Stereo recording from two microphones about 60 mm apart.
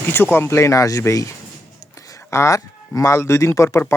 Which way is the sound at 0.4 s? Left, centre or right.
Left.